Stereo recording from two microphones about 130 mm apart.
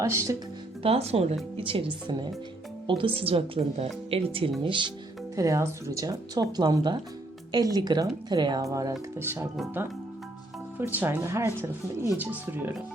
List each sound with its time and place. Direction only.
0.0 s speech: 25° right (ahead or behind)
0.8 s a woman's voice: 50° right (ahead or behind)
5.4 s speech: 25° right (ahead or behind)
10.8 s speech: 15° right (ahead or behind)